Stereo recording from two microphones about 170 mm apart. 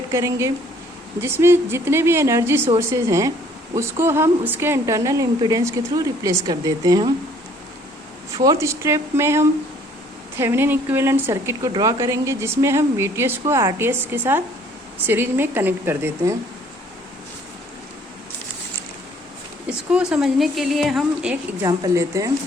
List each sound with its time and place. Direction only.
0.1 s a woman's voice: 15° right (ahead or behind)
8.4 s speech: 15° right (ahead or behind)
19.6 s a woman's voice: 5° right (ahead or behind)
21.6 s a woman's voice: 20° right (ahead or behind)